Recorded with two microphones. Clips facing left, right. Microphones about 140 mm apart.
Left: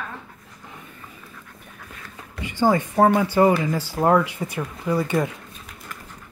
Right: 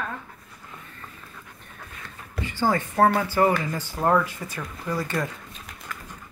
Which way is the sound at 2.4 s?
15° left (ahead or behind).